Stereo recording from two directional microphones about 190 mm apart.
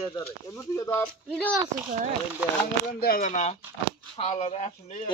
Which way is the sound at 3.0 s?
50° left (ahead or behind).